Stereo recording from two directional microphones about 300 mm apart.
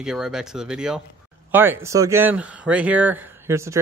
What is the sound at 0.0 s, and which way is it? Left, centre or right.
Speech, centre.